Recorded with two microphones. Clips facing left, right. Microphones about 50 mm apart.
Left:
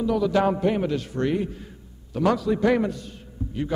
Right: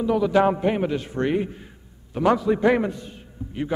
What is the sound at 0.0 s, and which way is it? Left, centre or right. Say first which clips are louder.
A man's voice: right 2 dB; centre.